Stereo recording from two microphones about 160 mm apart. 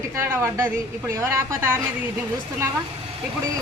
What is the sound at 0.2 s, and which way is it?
A woman's voice, 15° right (ahead or behind).